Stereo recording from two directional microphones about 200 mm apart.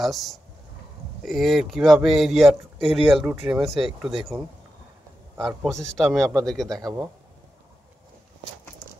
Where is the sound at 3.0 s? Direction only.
25° right (ahead or behind).